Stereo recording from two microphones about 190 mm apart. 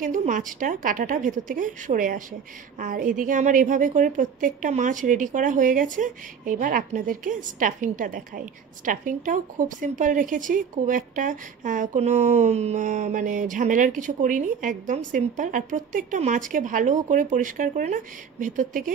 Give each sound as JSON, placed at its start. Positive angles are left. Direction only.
{"t": 0.0, "sound": "a woman's voice", "side_deg": -40}